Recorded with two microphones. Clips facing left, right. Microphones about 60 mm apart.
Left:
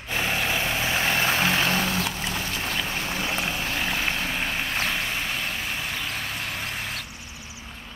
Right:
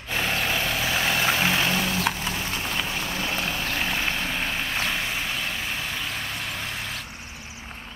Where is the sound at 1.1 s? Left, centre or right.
Left.